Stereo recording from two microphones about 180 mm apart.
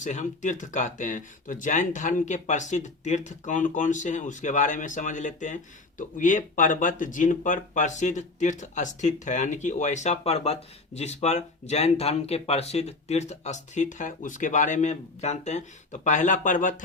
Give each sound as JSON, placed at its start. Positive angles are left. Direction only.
{"t": 0.0, "sound": "speech", "side_deg": 40}